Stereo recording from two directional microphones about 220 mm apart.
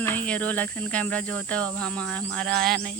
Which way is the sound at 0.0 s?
10° left (ahead or behind).